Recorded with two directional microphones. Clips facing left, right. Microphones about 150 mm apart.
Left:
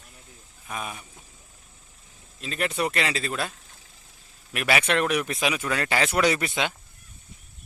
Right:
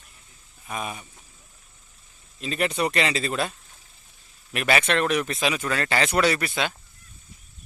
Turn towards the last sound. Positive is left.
turn(degrees=20)  # may be behind; listen again after turning